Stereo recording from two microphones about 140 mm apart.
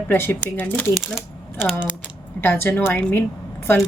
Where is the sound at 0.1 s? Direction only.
15° left (ahead or behind).